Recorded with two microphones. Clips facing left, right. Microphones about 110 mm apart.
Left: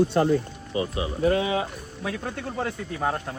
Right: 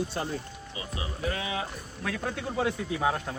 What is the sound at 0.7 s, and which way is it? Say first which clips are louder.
Speech: left 11 dB; 40° left (ahead or behind).